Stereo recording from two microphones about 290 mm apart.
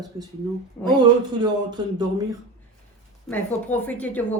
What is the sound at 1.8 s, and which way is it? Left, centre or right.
Speech, centre.